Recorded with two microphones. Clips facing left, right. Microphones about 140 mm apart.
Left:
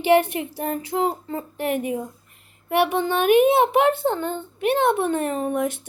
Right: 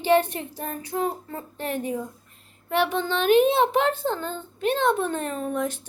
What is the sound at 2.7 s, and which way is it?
Speech, 15° left (ahead or behind).